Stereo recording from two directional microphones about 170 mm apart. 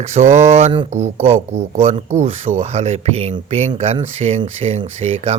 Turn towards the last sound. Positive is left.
turn(degrees=-35)  # may be behind; listen again after turning